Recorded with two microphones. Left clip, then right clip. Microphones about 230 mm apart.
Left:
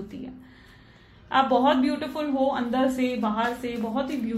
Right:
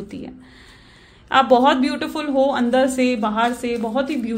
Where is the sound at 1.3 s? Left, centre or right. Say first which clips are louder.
Right 6 dB; right.